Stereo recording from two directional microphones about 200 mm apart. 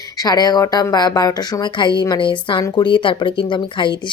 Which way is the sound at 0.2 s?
20° left (ahead or behind).